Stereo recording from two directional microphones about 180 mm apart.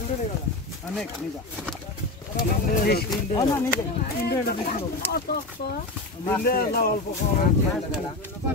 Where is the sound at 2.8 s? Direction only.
60° left (ahead or behind).